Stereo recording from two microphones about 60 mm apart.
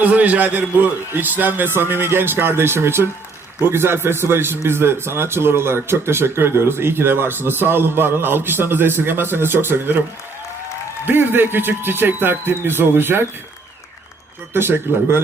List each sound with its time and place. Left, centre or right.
0.0 s a man's voice: right
11.0 s a man's voice: right
14.5 s a man's voice: right